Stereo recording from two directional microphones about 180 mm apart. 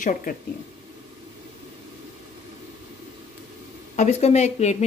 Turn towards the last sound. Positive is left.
turn(degrees=40)  # may be behind; listen again after turning